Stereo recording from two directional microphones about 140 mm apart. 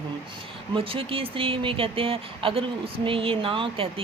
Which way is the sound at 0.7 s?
40° right (ahead or behind).